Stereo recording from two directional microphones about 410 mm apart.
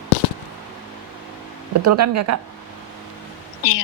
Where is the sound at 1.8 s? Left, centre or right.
Right.